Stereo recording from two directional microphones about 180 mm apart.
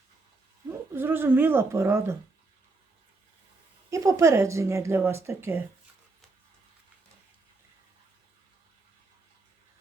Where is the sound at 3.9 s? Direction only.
15° right (ahead or behind).